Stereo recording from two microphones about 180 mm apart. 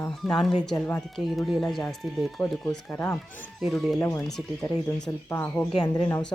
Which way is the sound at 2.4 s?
10° left (ahead or behind).